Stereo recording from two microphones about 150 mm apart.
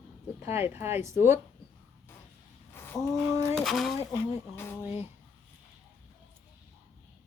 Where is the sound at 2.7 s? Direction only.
15° left (ahead or behind).